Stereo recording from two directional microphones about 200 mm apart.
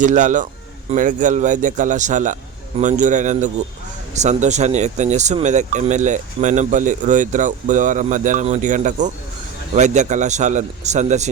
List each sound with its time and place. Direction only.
0.0 s speech: 40° right (ahead or behind)